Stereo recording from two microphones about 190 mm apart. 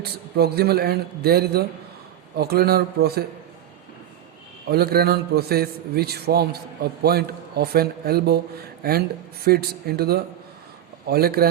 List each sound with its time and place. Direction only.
0.0 s speech: 55° right (ahead or behind)
4.7 s speech: 55° right (ahead or behind)